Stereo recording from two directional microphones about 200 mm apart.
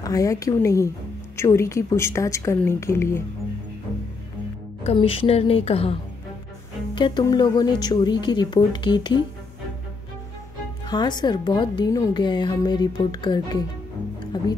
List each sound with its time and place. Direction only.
0.0 s a woman's voice: 15° left (ahead or behind)
4.8 s speech: 30° left (ahead or behind)
7.0 s speech: 20° left (ahead or behind)
10.9 s speech: 20° left (ahead or behind)